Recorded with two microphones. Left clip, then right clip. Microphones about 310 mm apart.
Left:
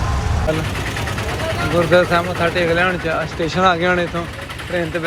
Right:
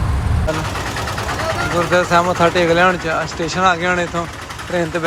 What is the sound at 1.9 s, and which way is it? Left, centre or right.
Speech, centre.